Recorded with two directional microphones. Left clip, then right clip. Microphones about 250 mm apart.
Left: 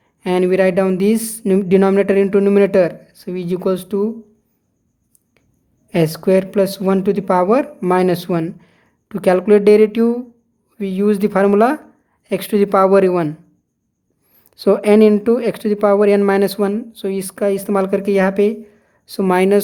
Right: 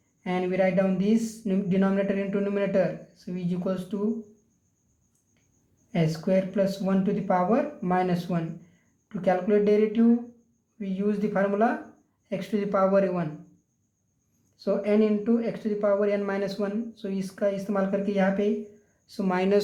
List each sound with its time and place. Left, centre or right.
0.2 s speech: left
5.9 s speech: left
14.5 s speech: left